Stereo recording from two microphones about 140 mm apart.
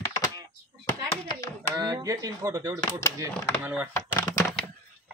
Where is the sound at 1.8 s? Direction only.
25° right (ahead or behind).